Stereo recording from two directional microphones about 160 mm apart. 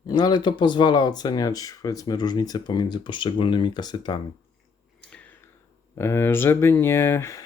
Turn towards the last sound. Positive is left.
turn(degrees=20)  # may be behind; listen again after turning